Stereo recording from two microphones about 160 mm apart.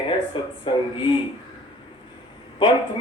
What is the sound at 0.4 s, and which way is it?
Speech, 30° left (ahead or behind).